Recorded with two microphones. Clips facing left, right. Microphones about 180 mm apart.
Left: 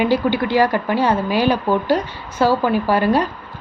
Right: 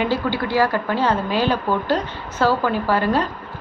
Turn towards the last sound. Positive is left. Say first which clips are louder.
# left 3 dB
turn(degrees=15)  # may be behind; listen again after turning